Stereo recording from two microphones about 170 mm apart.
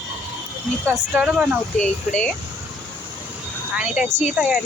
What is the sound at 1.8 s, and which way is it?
Speech, 5° left (ahead or behind).